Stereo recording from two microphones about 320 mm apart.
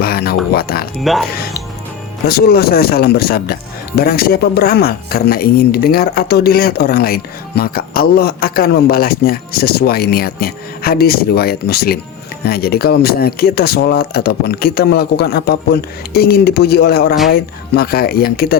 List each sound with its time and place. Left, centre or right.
0.0 s a sound: left
0.5 s speech: left
1.1 s speech: centre
2.2 s speech: left